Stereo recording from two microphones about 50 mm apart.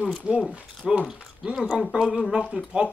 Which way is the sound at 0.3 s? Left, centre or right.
Right.